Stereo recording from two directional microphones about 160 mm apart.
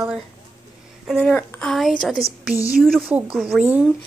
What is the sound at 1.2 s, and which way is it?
A woman's voice, 10° left (ahead or behind).